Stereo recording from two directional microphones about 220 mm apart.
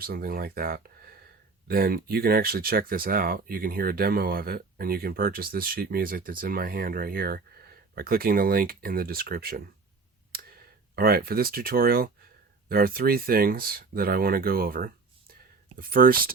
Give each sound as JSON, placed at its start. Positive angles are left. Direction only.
{"t": 0.0, "sound": "speech", "side_deg": -40}
{"t": 10.9, "sound": "speech", "side_deg": -40}